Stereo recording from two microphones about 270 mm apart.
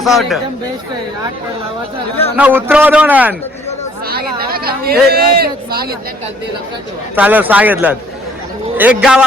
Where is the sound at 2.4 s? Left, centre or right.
Centre.